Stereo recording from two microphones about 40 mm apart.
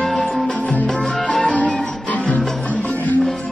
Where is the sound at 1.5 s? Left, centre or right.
Left.